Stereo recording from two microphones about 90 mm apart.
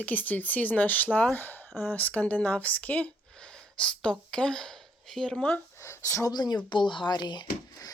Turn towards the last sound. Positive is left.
turn(degrees=55)  # may be behind; listen again after turning